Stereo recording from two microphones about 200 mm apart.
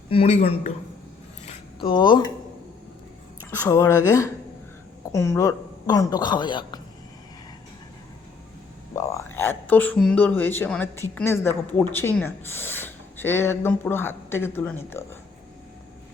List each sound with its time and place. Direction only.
0.1 s speech: 30° left (ahead or behind)
1.5 s a sound: 25° left (ahead or behind)
3.6 s speech: 15° left (ahead or behind)
9.0 s speech: 15° left (ahead or behind)